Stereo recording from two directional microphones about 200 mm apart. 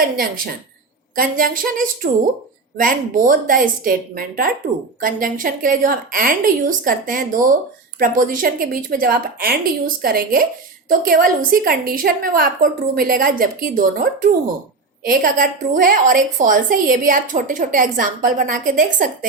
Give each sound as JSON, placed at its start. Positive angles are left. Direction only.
{"t": 0.0, "sound": "a woman's voice", "side_deg": -45}